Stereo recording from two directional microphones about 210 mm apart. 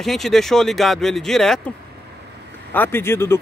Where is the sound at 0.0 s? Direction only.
Centre (ahead or behind).